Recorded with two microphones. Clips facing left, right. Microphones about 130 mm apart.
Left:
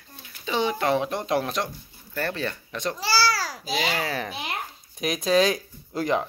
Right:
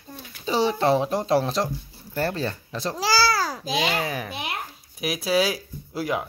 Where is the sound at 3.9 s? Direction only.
15° right (ahead or behind).